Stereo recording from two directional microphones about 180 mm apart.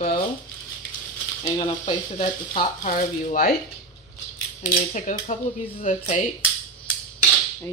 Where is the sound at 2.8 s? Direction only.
45° left (ahead or behind).